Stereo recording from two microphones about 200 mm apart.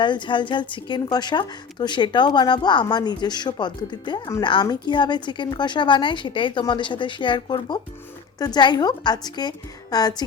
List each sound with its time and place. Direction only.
0.0 s a woman's voice: 25° left (ahead or behind)